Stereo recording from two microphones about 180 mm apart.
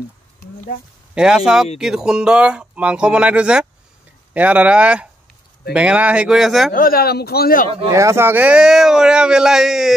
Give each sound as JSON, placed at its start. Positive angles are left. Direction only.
{"t": 1.1, "sound": "speech", "side_deg": -5}
{"t": 6.7, "sound": "speech", "side_deg": 55}
{"t": 7.9, "sound": "speech", "side_deg": -15}